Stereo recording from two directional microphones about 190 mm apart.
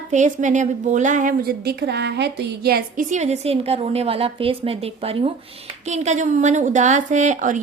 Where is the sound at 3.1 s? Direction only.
35° right (ahead or behind).